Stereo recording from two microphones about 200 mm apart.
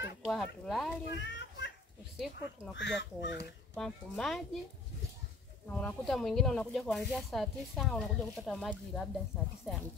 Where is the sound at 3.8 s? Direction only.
Centre (ahead or behind).